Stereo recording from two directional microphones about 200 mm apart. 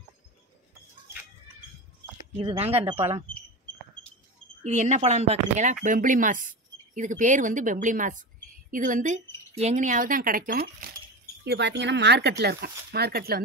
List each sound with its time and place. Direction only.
2.4 s speech: 30° right (ahead or behind)
4.6 s speech: 35° right (ahead or behind)
11.4 s speech: 60° right (ahead or behind)